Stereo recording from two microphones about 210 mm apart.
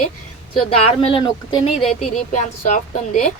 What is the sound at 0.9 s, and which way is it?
Speech, 25° left (ahead or behind).